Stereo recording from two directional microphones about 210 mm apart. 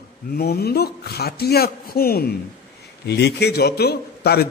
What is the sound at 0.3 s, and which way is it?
A man's voice, 50° left (ahead or behind).